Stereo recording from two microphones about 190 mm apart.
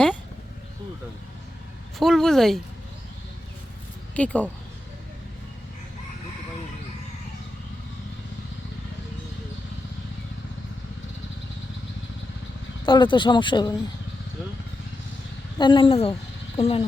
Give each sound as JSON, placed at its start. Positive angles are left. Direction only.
{"t": 2.0, "sound": "speech", "side_deg": 0}
{"t": 4.1, "sound": "speech", "side_deg": 5}
{"t": 12.8, "sound": "speech", "side_deg": 25}
{"t": 15.5, "sound": "speech", "side_deg": 25}